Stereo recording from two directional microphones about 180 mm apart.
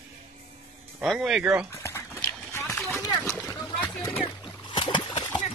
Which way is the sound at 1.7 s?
15° left (ahead or behind).